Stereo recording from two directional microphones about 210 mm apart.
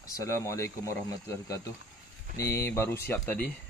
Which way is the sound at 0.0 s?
15° left (ahead or behind).